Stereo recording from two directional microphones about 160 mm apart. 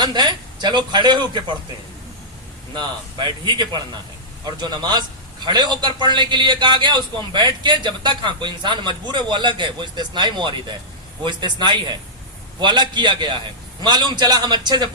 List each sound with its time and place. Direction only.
0.0 s a man's voice: 30° right (ahead or behind)
2.7 s a man's voice: 30° right (ahead or behind)